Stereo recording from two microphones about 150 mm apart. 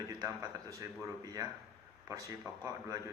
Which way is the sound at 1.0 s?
25° right (ahead or behind).